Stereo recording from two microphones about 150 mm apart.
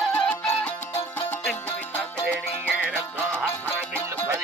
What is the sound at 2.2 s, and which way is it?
Music, 10° right (ahead or behind).